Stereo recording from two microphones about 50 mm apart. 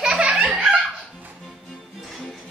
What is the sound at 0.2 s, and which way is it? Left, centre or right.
Laughter, right.